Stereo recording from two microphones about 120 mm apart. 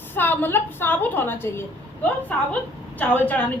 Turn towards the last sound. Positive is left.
turn(degrees=15)  # may be behind; listen again after turning